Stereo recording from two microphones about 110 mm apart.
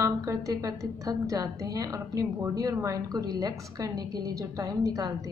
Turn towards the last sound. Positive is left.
turn(degrees=-30)  # may be behind; listen again after turning